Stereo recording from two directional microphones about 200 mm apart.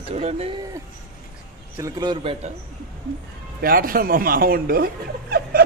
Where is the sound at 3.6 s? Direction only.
45° right (ahead or behind).